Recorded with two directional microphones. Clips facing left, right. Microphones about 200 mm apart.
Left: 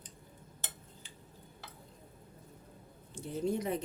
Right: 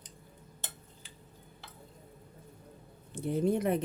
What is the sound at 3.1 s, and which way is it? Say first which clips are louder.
Speech: right 5 dB; 55° right (ahead or behind).